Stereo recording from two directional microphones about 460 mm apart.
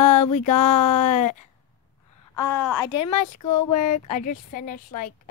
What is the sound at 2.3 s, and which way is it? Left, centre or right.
Speech, left.